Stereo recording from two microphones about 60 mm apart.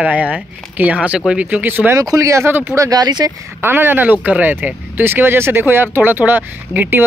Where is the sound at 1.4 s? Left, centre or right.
Right.